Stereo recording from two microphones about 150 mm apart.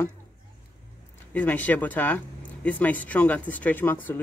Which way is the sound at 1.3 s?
10° left (ahead or behind).